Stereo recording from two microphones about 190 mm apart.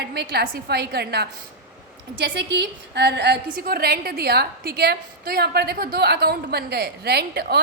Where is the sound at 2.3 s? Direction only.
65° right (ahead or behind).